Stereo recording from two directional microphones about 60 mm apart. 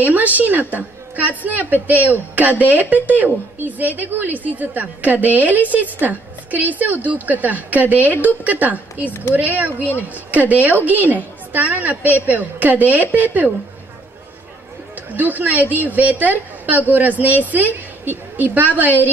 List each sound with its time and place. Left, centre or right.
0.0 s a woman's voice: right
15.0 s a woman's voice: right